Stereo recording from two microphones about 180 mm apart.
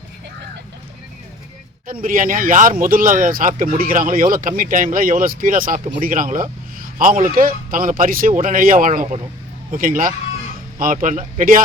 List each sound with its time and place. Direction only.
1.9 s a man's voice: 50° right (ahead or behind)